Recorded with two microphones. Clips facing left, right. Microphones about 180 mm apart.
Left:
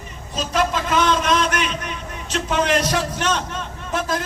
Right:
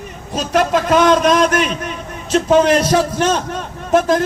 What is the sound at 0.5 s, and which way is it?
Speech, 50° right (ahead or behind).